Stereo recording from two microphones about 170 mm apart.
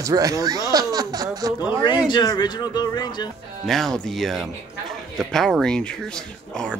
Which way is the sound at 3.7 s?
Centre (ahead or behind).